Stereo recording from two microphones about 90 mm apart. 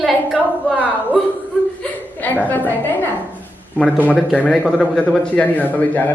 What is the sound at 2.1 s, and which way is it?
A woman's voice, 20° left (ahead or behind).